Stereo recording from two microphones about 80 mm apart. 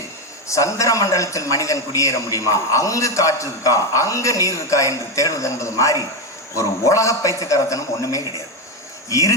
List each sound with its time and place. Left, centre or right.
0.4 s a man's voice: left